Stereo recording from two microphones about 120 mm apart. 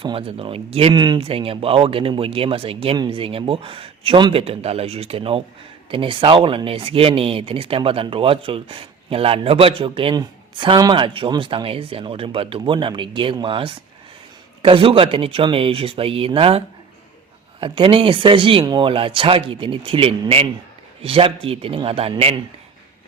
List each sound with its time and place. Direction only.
0.0 s speech: 50° right (ahead or behind)
0.9 s speech: 40° right (ahead or behind); by 22.1 s 55° right (ahead or behind)